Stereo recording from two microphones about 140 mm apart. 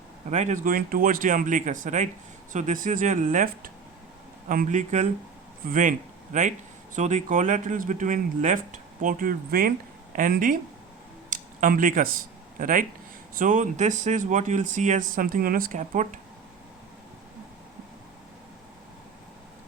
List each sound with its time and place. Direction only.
0.3 s speech: 55° right (ahead or behind)
5.6 s speech: 70° right (ahead or behind)
11.3 s a sound: 75° right (ahead or behind)
12.5 s speech: 80° right
13.3 s speech: 65° right (ahead or behind)